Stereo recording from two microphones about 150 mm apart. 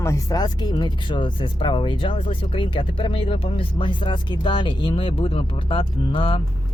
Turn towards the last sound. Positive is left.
turn(degrees=35)  # may be behind; listen again after turning